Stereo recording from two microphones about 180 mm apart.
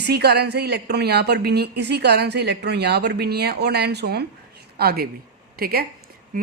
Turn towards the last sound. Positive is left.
turn(degrees=-60)  # may be behind; listen again after turning